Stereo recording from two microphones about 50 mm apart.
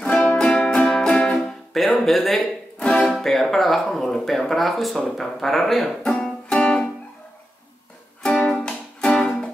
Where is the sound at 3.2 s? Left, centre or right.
Centre.